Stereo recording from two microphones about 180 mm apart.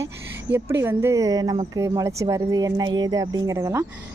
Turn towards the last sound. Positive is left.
turn(degrees=-15)  # may be behind; listen again after turning